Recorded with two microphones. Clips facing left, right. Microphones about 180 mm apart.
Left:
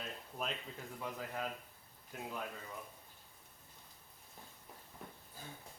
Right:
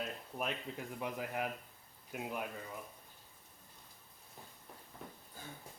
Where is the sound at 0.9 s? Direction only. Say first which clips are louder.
Right 3 dB; 15° right (ahead or behind).